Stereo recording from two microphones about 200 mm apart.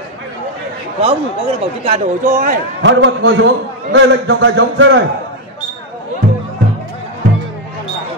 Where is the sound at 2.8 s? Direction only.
65° right (ahead or behind).